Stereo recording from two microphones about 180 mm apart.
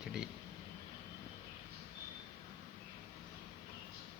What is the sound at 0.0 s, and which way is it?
Vehicle, 5° right (ahead or behind).